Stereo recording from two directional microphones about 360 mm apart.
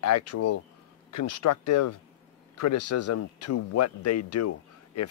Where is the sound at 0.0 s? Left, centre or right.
Left.